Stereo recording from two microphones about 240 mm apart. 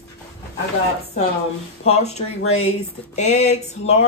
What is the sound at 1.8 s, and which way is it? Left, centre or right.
Speech, left.